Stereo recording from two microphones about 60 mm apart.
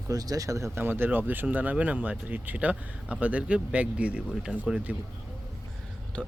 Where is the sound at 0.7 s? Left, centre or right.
Right; by 4.8 s centre.